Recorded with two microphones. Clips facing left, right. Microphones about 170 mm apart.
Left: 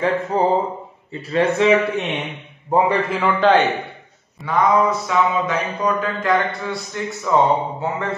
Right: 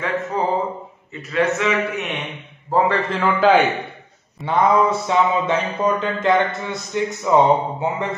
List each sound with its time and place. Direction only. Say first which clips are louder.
0.3 s a man's voice: left 2 dB; 30° left (ahead or behind)
2.7 s a man's voice: left 1 dB; 10° left (ahead or behind); by 3.6 s 5° right (ahead or behind)
4.4 s a sound: even; 25° right (ahead or behind)